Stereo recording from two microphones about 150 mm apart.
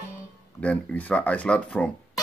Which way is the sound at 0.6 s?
5° left (ahead or behind).